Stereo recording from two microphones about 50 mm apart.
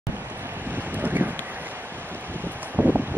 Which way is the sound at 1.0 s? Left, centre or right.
Right.